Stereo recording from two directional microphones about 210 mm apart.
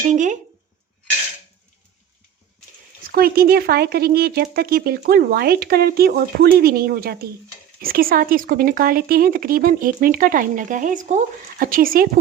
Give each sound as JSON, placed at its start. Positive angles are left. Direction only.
{"t": 0.1, "sound": "speech", "side_deg": -35}
{"t": 3.1, "sound": "speech", "side_deg": -45}